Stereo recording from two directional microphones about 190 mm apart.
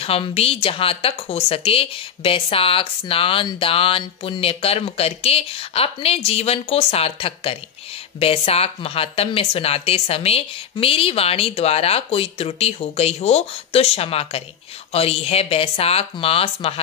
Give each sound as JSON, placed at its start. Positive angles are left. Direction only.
{"t": 0.0, "sound": "speech", "side_deg": 30}